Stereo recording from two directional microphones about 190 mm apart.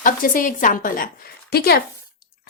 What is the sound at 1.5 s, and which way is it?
Speech, 55° left (ahead or behind).